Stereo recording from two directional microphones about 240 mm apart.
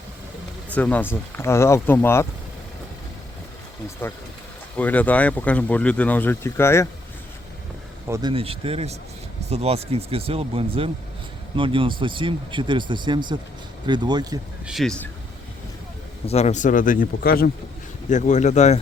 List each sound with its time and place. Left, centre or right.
0.7 s speech: centre
4.0 s speech: centre
8.0 s speech: centre
14.7 s speech: centre
16.2 s speech: left